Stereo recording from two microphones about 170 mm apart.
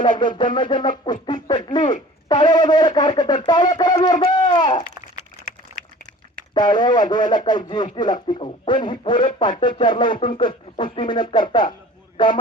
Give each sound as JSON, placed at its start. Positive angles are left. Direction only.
{"t": 0.0, "sound": "a man's voice", "side_deg": 25}
{"t": 6.5, "sound": "a man's voice", "side_deg": 25}